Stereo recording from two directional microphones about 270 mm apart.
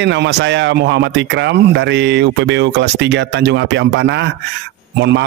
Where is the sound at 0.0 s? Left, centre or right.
Right.